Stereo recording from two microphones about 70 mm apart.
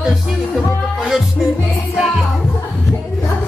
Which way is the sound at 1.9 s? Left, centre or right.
Centre.